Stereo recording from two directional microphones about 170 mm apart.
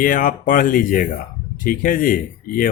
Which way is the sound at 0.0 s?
55° left (ahead or behind).